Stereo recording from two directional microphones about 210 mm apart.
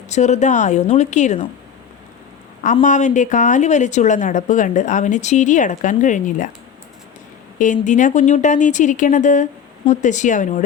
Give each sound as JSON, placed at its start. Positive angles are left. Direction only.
{"t": 0.1, "sound": "a woman's voice", "side_deg": 35}
{"t": 2.8, "sound": "a woman's voice", "side_deg": 35}
{"t": 7.6, "sound": "a woman's voice", "side_deg": 35}